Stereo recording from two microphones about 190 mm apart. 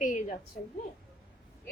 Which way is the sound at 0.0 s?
45° left (ahead or behind).